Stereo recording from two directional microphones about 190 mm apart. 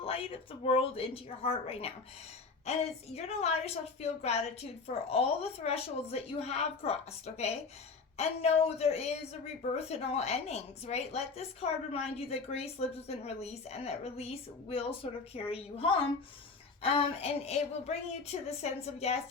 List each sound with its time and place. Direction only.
0.0 s a woman's voice: 30° left (ahead or behind)